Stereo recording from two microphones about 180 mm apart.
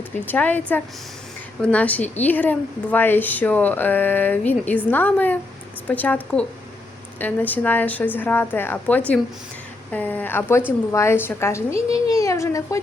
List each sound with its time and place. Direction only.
0.3 s a woman's voice: 10° left (ahead or behind)